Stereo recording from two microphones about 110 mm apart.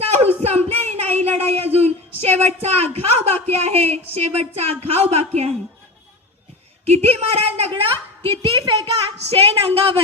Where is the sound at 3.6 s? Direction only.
70° right (ahead or behind).